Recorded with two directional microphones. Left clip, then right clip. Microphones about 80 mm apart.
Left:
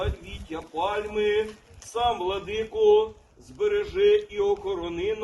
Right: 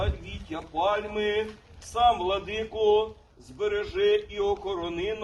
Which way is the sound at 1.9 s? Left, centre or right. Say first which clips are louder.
Right 3 dB; right.